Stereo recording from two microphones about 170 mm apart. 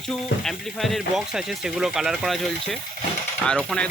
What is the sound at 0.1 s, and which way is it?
Speech, centre (ahead or behind).